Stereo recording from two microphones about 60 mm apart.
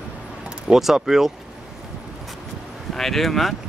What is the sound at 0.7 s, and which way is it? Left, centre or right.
Speech, centre.